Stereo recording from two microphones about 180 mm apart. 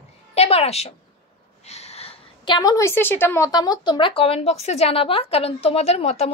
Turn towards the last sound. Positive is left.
turn(degrees=35)  # may be behind; listen again after turning